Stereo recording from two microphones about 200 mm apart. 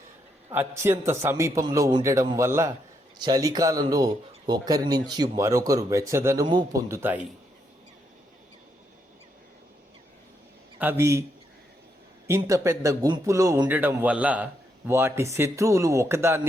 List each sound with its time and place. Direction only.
0.5 s a man's voice: 10° right (ahead or behind)
10.8 s a man's voice: 10° right (ahead or behind)
12.3 s a man's voice: 15° right (ahead or behind)